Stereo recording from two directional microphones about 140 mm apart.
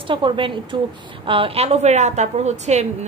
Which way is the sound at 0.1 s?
35° right (ahead or behind).